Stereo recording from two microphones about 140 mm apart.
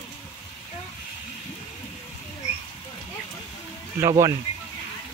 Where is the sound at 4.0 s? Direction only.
20° right (ahead or behind).